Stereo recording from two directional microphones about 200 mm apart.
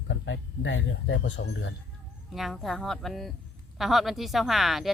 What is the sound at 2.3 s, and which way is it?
Speech, centre (ahead or behind).